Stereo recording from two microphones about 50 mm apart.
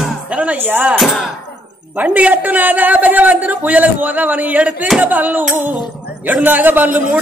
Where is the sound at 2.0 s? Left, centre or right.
Right.